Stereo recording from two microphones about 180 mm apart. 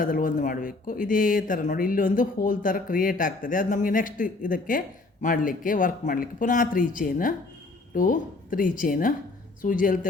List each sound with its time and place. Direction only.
0.0 s speech: 50° left (ahead or behind)